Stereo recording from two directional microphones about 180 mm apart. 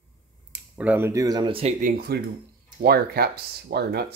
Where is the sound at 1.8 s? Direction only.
55° right (ahead or behind).